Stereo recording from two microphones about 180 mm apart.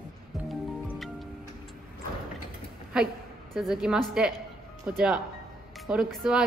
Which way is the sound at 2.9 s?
5° right (ahead or behind).